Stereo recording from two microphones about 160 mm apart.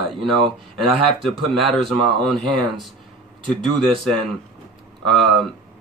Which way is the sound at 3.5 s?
Centre (ahead or behind).